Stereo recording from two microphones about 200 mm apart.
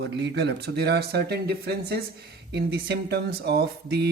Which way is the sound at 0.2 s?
60° right (ahead or behind).